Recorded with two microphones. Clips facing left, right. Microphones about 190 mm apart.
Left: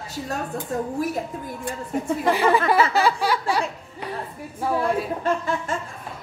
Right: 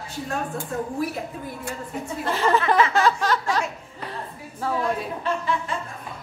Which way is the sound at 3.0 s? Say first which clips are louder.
Even; 10° left (ahead or behind).